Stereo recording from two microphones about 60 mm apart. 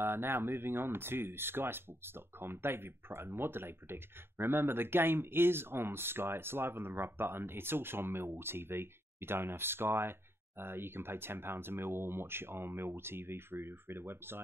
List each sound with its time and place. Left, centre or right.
0.0 s speech: right